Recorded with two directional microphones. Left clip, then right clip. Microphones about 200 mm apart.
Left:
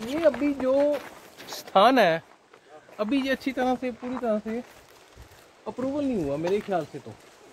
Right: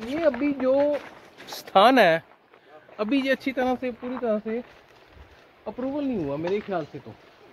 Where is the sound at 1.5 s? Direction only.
35° right (ahead or behind).